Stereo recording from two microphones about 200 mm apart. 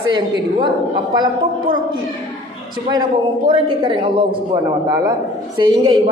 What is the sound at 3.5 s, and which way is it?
A woman's voice, 25° right (ahead or behind).